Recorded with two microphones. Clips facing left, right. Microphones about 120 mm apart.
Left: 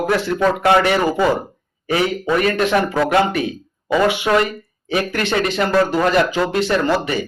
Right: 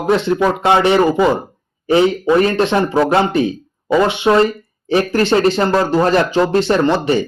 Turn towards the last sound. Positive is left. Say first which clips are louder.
# right 4 dB
turn(degrees=-30)  # may be behind; listen again after turning